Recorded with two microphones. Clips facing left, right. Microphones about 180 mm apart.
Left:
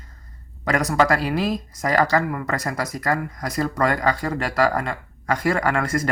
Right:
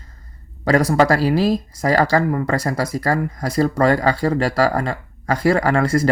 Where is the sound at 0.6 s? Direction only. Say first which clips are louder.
Right 4 dB; 35° right (ahead or behind).